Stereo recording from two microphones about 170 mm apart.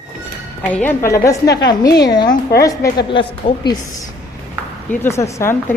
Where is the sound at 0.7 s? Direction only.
10° left (ahead or behind); by 3.8 s 25° left (ahead or behind).